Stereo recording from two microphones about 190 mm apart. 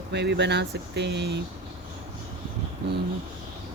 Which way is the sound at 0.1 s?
65° right (ahead or behind).